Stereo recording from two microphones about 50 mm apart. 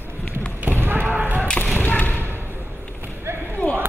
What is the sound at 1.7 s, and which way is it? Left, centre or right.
Thump, left.